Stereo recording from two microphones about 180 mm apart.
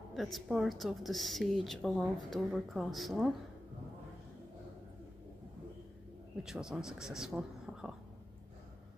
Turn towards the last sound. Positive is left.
turn(degrees=-5)  # may be behind; listen again after turning